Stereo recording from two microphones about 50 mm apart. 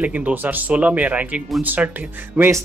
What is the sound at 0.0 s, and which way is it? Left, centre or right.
Speech, right.